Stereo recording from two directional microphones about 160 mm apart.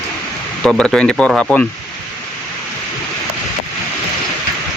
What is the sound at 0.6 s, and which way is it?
Speech, 5° left (ahead or behind).